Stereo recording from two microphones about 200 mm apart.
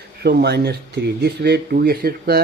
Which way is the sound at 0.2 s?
55° right (ahead or behind).